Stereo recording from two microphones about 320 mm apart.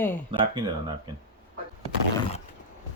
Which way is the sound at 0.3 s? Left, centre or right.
Centre.